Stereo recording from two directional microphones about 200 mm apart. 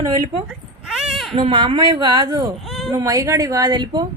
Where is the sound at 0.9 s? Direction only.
Centre (ahead or behind).